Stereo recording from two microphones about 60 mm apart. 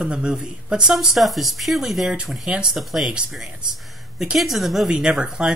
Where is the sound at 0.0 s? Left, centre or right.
Centre.